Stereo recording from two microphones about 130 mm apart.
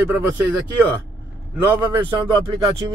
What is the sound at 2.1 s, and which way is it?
Speech, 30° right (ahead or behind).